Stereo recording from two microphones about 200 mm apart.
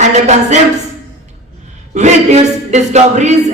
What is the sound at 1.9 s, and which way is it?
Speech, 35° right (ahead or behind).